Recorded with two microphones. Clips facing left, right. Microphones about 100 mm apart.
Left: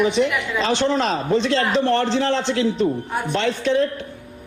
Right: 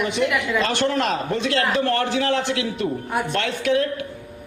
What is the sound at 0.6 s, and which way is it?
Speech, 55° right (ahead or behind).